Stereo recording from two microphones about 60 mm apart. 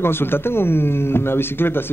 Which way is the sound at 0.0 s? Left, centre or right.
Left.